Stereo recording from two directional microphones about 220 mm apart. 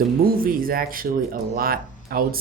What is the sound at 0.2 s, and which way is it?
Speech, 40° right (ahead or behind).